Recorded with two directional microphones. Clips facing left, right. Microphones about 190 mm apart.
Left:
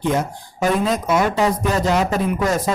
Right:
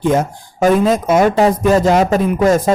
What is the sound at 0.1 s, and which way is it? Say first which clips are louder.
Speech: right 5 dB; 50° right (ahead or behind).